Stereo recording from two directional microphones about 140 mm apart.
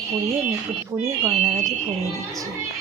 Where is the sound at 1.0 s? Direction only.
20° right (ahead or behind).